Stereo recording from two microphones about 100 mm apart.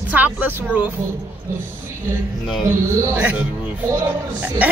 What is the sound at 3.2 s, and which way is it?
Speech, 15° right (ahead or behind).